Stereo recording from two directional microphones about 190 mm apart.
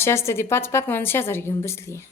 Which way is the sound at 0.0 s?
15° left (ahead or behind).